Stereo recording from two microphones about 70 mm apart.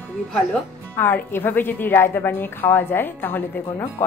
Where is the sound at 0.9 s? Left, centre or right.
Left.